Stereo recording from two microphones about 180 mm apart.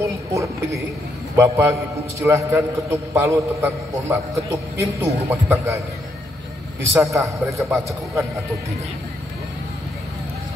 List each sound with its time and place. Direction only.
0.0 s a sound: 15° right (ahead or behind)
1.3 s a man's voice: 15° right (ahead or behind)
6.9 s a man's voice: 15° right (ahead or behind)